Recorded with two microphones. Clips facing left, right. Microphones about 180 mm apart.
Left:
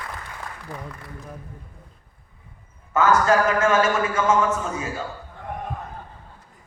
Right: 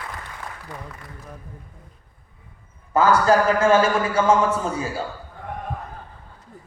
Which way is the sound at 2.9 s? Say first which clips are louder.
Right 1 dB; 35° right (ahead or behind).